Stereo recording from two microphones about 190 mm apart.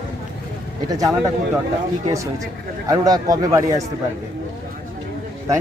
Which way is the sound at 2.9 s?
20° right (ahead or behind).